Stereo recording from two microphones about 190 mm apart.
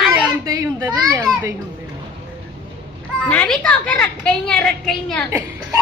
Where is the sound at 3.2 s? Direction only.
5° left (ahead or behind).